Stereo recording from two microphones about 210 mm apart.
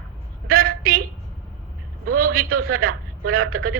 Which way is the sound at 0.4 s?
45° right (ahead or behind).